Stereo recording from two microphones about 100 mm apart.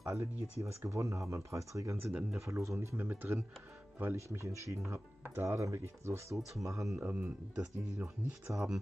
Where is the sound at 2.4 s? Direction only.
30° right (ahead or behind).